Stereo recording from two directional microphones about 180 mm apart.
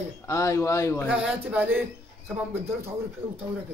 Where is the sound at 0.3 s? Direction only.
15° left (ahead or behind).